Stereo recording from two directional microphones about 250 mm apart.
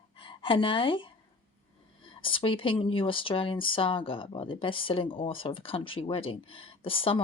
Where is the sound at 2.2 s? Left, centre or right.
Left.